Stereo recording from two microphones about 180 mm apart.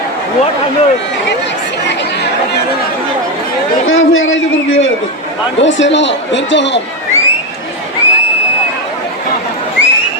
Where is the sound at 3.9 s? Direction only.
90° left.